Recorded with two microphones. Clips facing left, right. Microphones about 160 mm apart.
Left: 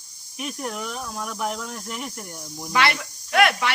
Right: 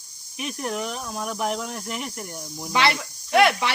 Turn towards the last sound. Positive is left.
turn(degrees=-25)  # may be behind; listen again after turning